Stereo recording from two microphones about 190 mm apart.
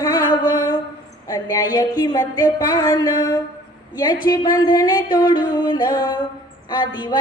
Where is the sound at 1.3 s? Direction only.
20° left (ahead or behind).